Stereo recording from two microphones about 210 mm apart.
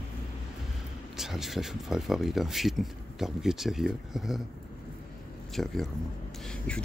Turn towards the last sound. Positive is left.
turn(degrees=5)  # may be behind; listen again after turning